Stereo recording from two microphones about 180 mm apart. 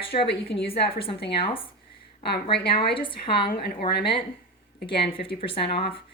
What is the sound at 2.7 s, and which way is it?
Speech, 30° left (ahead or behind).